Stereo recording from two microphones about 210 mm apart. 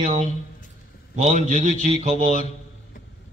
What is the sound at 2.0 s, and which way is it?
Speech, 30° right (ahead or behind).